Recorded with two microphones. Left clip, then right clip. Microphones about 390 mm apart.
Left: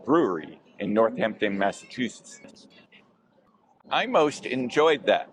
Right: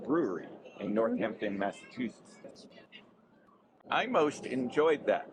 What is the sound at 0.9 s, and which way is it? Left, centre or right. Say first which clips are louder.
Speech: left 8 dB; left.